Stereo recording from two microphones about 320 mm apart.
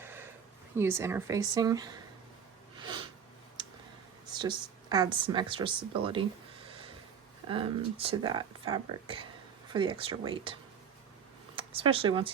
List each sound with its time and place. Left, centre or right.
0.0 s a sound: centre
0.8 s speech: centre
2.8 s a sound: centre
4.3 s speech: centre
7.4 s speech: centre
11.5 s speech: centre